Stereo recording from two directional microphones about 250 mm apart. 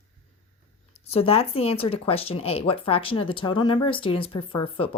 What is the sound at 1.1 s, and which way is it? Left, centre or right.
A woman's voice, left.